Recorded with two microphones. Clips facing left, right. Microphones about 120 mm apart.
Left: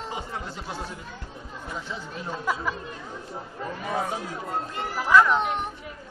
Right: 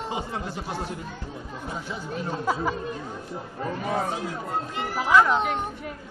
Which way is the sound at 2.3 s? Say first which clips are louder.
Right 2 dB; 30° right (ahead or behind).